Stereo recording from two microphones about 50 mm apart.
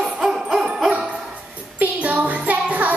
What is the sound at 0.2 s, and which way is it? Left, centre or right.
Music, centre.